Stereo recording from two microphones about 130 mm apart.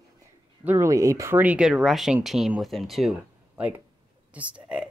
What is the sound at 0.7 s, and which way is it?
Speech, 25° right (ahead or behind).